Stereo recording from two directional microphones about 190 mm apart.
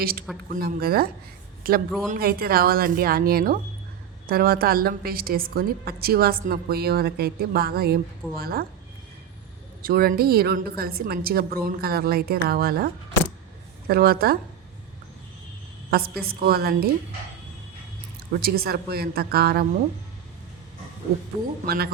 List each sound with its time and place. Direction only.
0.0 s a woman's voice: 50° right (ahead or behind)
9.8 s a woman's voice: 50° right (ahead or behind)
15.9 s a woman's voice: 55° right (ahead or behind)
18.3 s a woman's voice: 50° right (ahead or behind)
21.7 s a woman's voice: 55° right (ahead or behind)